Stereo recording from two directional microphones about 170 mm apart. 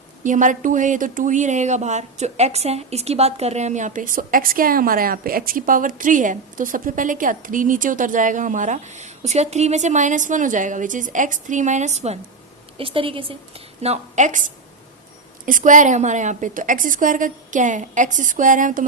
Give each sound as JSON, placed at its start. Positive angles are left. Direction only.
{"t": 0.2, "sound": "a woman's voice", "side_deg": -50}